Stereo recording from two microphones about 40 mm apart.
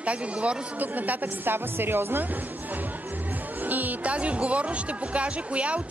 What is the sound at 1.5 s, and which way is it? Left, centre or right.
Speech, right.